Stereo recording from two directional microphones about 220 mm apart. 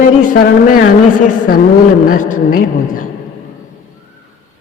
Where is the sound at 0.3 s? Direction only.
40° left (ahead or behind).